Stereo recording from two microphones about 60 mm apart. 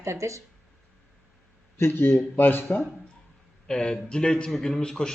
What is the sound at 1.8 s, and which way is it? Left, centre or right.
Speech, left.